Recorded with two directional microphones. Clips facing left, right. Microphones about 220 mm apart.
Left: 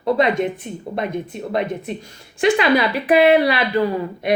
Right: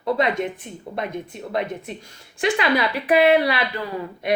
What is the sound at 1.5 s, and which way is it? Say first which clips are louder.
Speech: left 3 dB; 20° left (ahead or behind).